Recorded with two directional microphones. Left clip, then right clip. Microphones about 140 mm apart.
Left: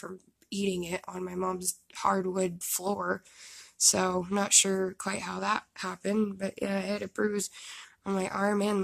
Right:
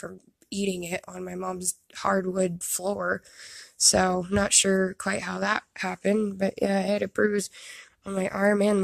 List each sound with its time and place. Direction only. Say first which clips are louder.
0.0 s speech: right 3 dB; 30° right (ahead or behind)